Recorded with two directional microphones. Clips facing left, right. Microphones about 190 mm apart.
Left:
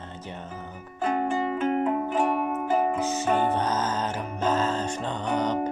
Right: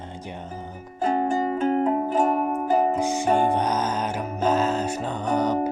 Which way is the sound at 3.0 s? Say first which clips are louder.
Right 3 dB; 15° right (ahead or behind).